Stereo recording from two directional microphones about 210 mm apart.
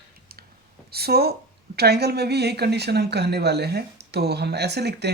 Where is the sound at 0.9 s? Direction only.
50° right (ahead or behind).